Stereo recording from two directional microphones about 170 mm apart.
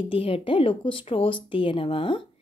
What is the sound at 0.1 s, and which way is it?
Speech, 30° left (ahead or behind).